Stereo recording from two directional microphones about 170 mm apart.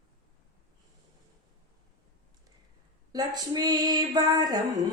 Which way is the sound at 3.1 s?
25° right (ahead or behind).